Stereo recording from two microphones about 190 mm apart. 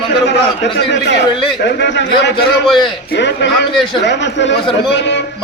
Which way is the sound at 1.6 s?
65° left (ahead or behind).